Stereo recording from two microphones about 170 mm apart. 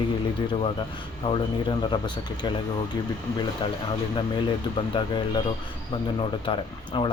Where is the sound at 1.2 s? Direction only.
30° left (ahead or behind).